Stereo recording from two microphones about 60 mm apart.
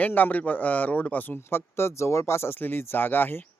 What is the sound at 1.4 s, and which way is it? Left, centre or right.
Speech, left.